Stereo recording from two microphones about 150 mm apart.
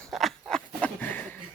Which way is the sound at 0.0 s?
Centre (ahead or behind).